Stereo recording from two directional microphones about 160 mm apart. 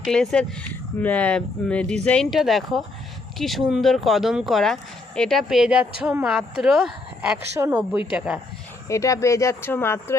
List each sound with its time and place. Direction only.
0.0 s speech: 5° left (ahead or behind)
7.5 s speech: 15° right (ahead or behind)
7.8 s speech: 5° right (ahead or behind)
8.9 s speech: 20° left (ahead or behind)